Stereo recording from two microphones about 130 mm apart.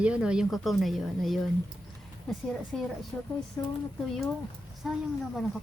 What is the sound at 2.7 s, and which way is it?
Speech, centre (ahead or behind).